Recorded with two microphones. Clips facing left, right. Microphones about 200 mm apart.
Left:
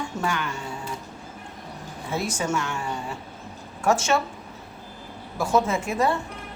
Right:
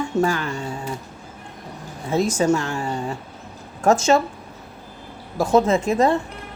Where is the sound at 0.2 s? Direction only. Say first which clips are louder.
Right 8 dB; 35° right (ahead or behind).